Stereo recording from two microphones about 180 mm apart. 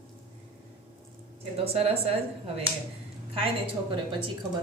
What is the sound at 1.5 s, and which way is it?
Speech, 35° right (ahead or behind).